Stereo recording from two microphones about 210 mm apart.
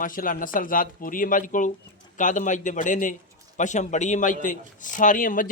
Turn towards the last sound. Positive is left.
turn(degrees=40)  # may be behind; listen again after turning